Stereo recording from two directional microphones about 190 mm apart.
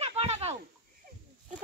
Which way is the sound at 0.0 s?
35° right (ahead or behind).